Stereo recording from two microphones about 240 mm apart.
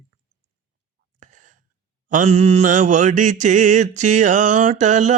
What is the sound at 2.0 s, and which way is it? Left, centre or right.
Mantra, right.